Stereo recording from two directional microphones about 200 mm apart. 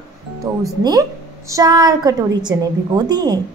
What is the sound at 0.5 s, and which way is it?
A woman's voice, 15° right (ahead or behind).